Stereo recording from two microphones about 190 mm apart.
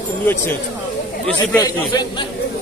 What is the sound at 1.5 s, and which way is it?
Speech, 20° left (ahead or behind).